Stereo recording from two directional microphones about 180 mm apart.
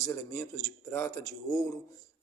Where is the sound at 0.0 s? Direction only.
15° left (ahead or behind).